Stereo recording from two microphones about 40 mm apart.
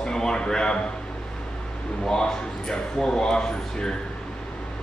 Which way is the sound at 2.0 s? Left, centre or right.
Centre.